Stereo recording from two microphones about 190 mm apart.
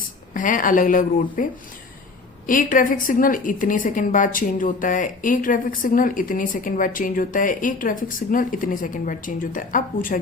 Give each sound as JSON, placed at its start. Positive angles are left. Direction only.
{"t": 0.3, "sound": "a woman's voice", "side_deg": 45}
{"t": 2.5, "sound": "a woman's voice", "side_deg": 45}